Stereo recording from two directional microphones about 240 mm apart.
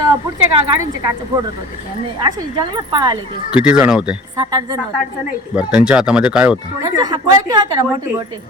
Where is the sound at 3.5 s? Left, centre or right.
Centre.